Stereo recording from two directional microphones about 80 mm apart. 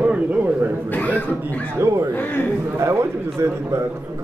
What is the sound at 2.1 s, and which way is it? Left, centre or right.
Speech, left.